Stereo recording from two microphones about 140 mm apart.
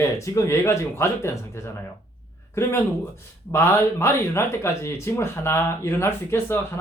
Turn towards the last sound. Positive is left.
turn(degrees=15)  # may be behind; listen again after turning